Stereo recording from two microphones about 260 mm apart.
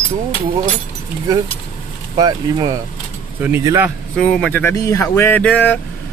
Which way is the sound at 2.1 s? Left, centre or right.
Centre.